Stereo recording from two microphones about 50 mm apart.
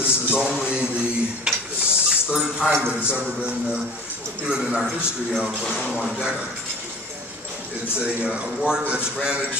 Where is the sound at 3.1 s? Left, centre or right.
Right.